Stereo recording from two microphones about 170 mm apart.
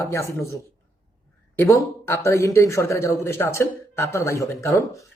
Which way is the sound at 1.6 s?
15° left (ahead or behind).